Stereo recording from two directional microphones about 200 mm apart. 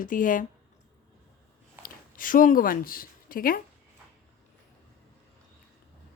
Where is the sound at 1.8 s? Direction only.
45° left (ahead or behind).